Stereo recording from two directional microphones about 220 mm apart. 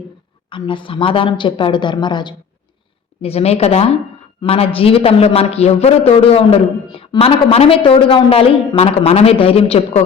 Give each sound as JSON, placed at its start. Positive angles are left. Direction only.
{"t": 0.5, "sound": "a man's voice", "side_deg": 20}